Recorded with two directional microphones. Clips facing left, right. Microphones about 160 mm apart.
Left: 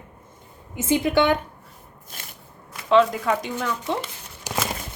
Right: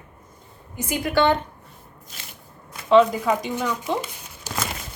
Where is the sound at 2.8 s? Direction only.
Centre (ahead or behind).